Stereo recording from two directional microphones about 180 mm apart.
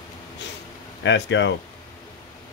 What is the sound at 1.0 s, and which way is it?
Speech, 85° left.